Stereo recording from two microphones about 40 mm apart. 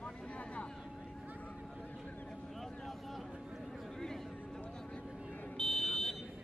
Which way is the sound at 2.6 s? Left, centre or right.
Centre.